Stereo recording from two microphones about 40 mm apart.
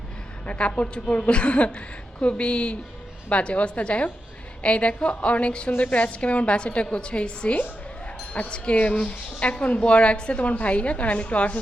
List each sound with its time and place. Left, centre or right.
0.4 s a woman's voice: left